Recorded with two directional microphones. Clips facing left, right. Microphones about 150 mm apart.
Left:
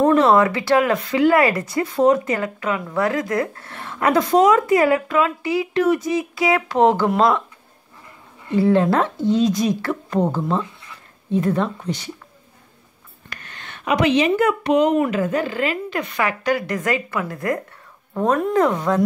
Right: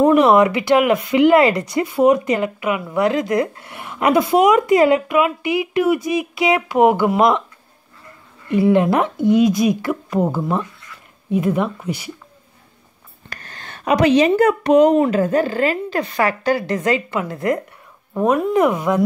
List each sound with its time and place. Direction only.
0.0 s speech: 15° right (ahead or behind)
8.5 s speech: 15° right (ahead or behind)
13.3 s speech: 35° right (ahead or behind)
18.1 s speech: 5° right (ahead or behind)